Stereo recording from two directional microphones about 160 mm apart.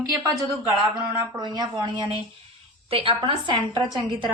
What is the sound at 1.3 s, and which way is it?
A woman's voice, 25° right (ahead or behind).